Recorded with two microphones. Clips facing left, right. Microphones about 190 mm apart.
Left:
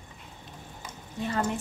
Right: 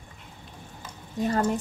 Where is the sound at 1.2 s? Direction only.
40° right (ahead or behind).